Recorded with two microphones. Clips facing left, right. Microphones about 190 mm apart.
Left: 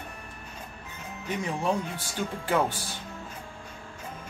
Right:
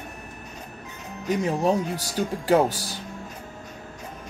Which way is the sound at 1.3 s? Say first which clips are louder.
Right 6 dB; 40° right (ahead or behind).